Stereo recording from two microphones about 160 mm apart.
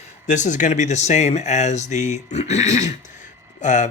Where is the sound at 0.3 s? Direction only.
50° left (ahead or behind).